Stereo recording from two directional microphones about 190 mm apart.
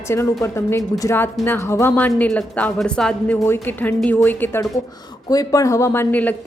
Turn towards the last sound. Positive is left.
turn(degrees=10)  # may be behind; listen again after turning